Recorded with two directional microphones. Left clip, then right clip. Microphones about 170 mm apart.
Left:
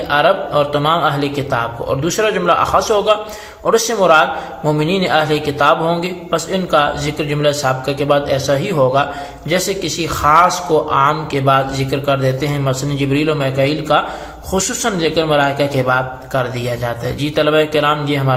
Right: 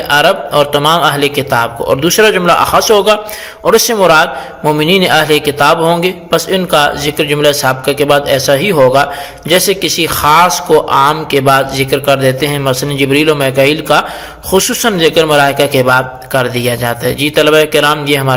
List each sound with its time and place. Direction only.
0.1 s a man's voice: 30° right (ahead or behind)